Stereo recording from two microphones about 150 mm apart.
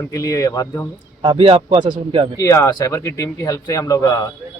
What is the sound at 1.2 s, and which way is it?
A man's voice, 35° right (ahead or behind).